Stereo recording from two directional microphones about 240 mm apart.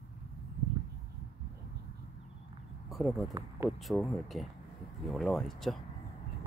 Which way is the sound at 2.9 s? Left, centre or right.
Centre.